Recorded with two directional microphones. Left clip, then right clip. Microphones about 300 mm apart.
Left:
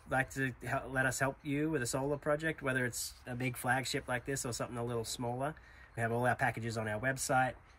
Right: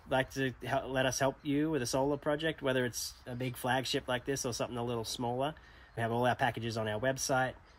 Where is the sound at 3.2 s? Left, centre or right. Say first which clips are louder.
Even; centre.